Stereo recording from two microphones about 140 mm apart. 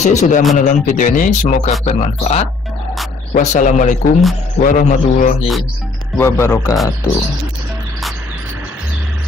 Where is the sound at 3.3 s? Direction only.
65° left (ahead or behind).